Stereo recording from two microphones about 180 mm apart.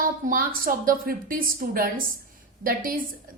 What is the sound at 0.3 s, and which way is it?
A woman's voice, 50° right (ahead or behind).